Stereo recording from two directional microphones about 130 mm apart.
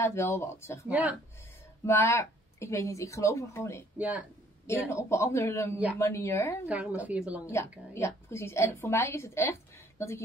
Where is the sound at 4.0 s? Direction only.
10° right (ahead or behind).